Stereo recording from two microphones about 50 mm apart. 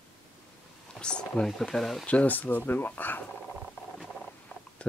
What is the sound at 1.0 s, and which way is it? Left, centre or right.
Speech, centre.